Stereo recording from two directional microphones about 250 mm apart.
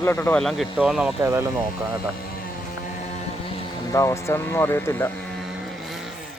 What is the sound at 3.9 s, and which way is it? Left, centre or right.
Music, centre.